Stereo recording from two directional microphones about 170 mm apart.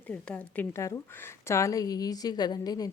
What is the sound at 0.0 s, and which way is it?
A woman's voice, 5° left (ahead or behind).